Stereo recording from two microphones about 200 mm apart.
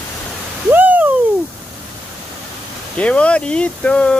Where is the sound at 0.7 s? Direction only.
10° right (ahead or behind).